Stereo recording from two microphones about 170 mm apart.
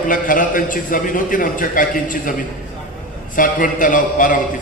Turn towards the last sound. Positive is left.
turn(degrees=50)  # may be behind; listen again after turning